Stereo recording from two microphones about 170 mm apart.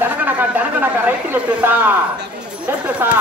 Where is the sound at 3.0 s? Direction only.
10° right (ahead or behind).